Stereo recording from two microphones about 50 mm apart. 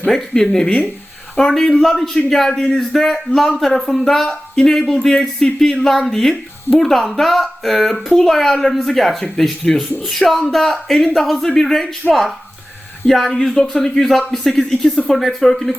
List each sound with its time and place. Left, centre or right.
0.0 s speech: centre
13.1 s speech: centre